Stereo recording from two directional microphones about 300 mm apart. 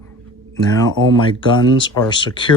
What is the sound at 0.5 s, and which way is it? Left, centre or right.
Speech, centre.